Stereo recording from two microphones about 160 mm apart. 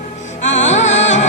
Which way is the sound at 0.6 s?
45° left (ahead or behind).